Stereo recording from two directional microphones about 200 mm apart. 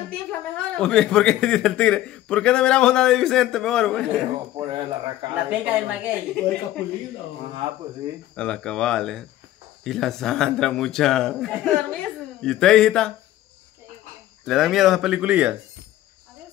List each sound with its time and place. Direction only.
0.1 s speech: 5° left (ahead or behind)
4.6 s speech: 25° right (ahead or behind)
5.5 s a woman's voice: 5° right (ahead or behind)
8.4 s speech: 5° left (ahead or behind)
14.4 s speech: centre (ahead or behind)